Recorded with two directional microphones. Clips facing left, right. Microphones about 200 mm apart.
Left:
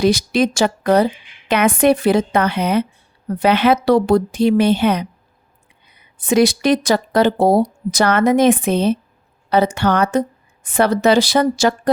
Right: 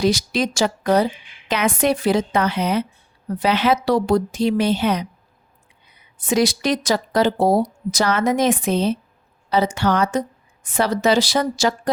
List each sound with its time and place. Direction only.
0.0 s speech: 60° left (ahead or behind)
6.2 s speech: 60° left (ahead or behind)